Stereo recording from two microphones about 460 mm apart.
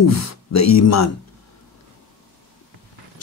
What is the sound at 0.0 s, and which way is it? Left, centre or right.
A man's voice, left.